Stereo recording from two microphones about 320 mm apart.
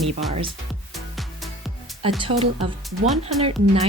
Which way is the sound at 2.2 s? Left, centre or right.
Centre.